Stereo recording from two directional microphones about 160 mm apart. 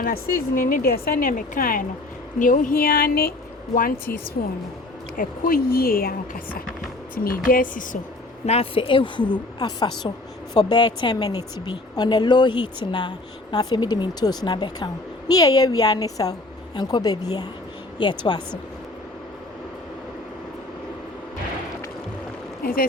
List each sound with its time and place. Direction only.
0.0 s speech: 70° left (ahead or behind)
5.1 s speech: 65° left (ahead or behind)
8.4 s a woman's voice: 35° left (ahead or behind)
22.6 s speech: 65° left (ahead or behind)